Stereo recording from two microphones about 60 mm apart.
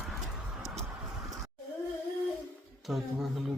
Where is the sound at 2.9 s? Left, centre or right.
Centre.